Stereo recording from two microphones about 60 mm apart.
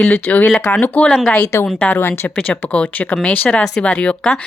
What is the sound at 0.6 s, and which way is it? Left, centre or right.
Speech, left.